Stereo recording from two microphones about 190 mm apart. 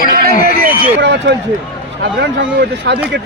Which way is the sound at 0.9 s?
70° right (ahead or behind).